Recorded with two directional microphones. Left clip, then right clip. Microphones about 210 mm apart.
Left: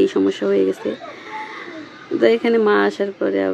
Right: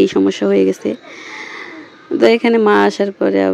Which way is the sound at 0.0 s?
35° right (ahead or behind).